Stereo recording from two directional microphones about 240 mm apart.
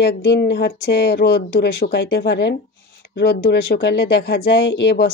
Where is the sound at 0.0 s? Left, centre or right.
Left.